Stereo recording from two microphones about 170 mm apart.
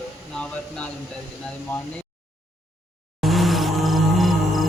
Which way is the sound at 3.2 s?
Centre (ahead or behind).